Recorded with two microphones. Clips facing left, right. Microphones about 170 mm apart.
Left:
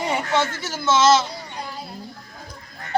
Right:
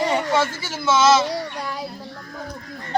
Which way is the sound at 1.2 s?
90° right.